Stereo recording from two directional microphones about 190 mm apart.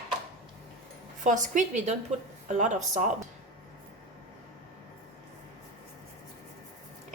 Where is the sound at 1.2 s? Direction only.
40° right (ahead or behind).